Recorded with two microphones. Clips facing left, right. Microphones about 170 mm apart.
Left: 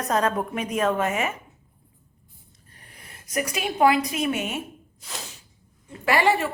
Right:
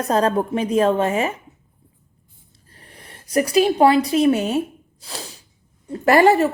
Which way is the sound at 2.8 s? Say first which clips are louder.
Right 5 dB; 35° right (ahead or behind).